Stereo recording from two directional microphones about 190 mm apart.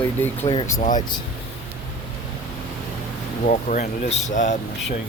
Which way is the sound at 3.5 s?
40° left (ahead or behind).